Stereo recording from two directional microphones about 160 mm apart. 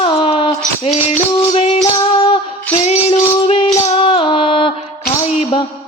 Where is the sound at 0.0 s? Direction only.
35° left (ahead or behind).